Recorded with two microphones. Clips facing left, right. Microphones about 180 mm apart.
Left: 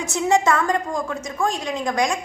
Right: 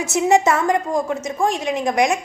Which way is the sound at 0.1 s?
20° right (ahead or behind).